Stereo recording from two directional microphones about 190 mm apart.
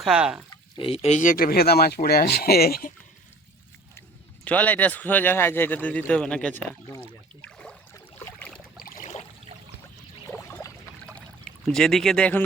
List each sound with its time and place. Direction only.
0.0 s speech: 5° right (ahead or behind)
0.8 s speech: 30° left (ahead or behind); by 2.9 s 50° left (ahead or behind)
4.4 s speech: 10° left (ahead or behind)
7.4 s a sound: 5° left (ahead or behind)
8.8 s a sound: 40° left (ahead or behind)
10.2 s pour: 15° left (ahead or behind)
11.6 s speech: 5° left (ahead or behind)